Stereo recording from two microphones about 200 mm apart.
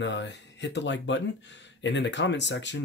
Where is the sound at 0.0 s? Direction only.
60° left (ahead or behind).